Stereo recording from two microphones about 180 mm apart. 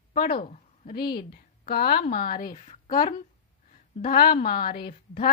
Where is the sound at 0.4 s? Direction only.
45° left (ahead or behind).